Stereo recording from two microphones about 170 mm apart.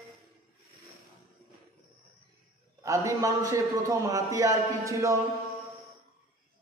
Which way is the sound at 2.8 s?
20° right (ahead or behind).